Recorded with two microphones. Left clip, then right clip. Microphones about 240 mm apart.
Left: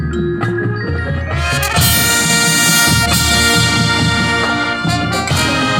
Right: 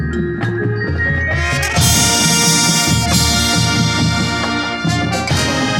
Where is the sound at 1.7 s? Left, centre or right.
Centre.